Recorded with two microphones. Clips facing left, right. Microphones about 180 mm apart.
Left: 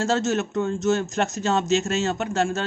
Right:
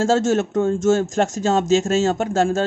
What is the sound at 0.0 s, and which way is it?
Speech, 45° right (ahead or behind).